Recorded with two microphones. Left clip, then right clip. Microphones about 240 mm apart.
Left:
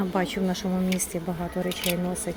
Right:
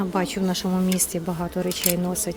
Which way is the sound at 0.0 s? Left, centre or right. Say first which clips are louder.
Right 2 dB; centre.